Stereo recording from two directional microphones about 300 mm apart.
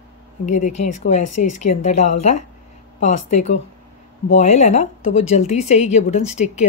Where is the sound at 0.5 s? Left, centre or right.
Left.